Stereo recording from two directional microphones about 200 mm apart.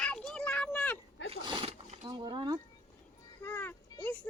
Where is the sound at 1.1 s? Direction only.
65° left (ahead or behind).